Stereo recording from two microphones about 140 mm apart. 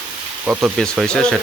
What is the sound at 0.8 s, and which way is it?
Speech, 5° left (ahead or behind).